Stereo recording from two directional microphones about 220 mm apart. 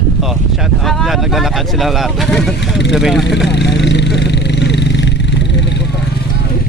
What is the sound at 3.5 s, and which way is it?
Vehicle, 50° left (ahead or behind).